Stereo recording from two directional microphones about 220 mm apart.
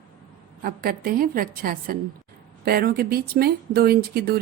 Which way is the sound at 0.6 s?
40° right (ahead or behind).